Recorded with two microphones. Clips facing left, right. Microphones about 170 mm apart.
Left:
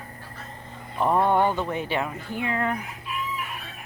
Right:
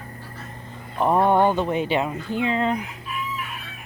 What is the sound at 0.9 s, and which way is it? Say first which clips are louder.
Speech: right 3 dB; 15° right (ahead or behind).